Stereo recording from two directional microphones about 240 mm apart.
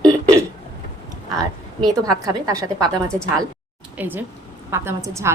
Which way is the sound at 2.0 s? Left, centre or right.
Centre.